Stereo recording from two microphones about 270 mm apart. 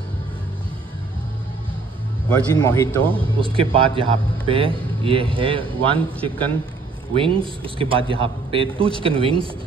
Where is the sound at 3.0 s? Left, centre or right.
Centre.